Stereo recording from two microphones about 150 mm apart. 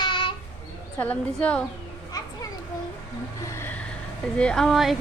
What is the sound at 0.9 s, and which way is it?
Speech, 10° left (ahead or behind).